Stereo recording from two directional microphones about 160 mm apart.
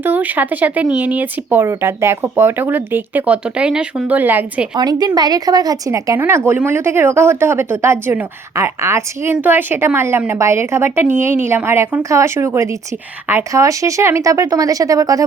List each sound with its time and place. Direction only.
0.0 s speech: 10° right (ahead or behind)
4.8 s speech: 25° right (ahead or behind)